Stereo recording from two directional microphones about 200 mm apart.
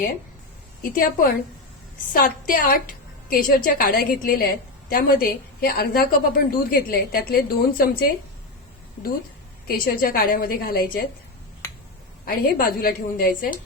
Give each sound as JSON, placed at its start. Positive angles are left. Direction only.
{"t": 0.8, "sound": "a woman's voice", "side_deg": 45}
{"t": 9.6, "sound": "a woman's voice", "side_deg": 45}
{"t": 11.6, "sound": "a sound", "side_deg": 10}
{"t": 12.2, "sound": "a woman's voice", "side_deg": 45}